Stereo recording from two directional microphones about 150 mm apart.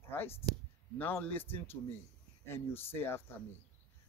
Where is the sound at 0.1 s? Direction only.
15° left (ahead or behind).